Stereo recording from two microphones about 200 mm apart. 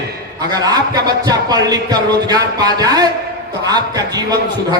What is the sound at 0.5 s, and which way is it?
A man's voice, 20° right (ahead or behind).